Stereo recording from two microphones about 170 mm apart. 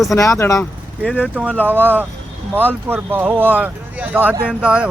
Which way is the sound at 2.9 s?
10° right (ahead or behind).